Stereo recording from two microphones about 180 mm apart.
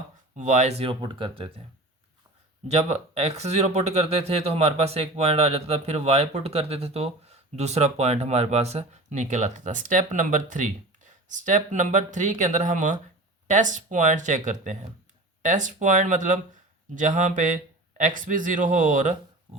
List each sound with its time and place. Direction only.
0.3 s speech: 40° right (ahead or behind)
2.6 s a man's voice: 35° right (ahead or behind)